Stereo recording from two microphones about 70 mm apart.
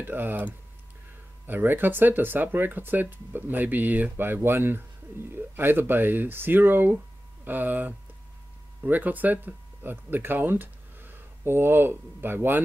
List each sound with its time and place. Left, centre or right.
0.0 s speech: right
1.5 s speech: right